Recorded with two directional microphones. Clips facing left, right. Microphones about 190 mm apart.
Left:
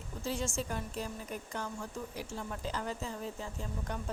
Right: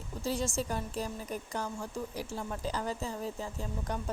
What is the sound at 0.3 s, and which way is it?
Speech, 35° right (ahead or behind).